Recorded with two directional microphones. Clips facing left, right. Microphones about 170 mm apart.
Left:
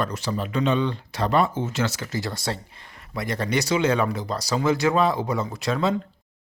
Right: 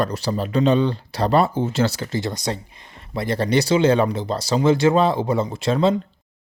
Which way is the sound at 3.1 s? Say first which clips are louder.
Right 5 dB; 30° right (ahead or behind).